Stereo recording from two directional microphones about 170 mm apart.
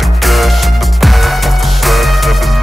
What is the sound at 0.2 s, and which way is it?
Music, centre (ahead or behind).